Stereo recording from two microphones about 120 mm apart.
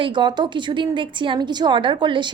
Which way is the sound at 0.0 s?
40° right (ahead or behind).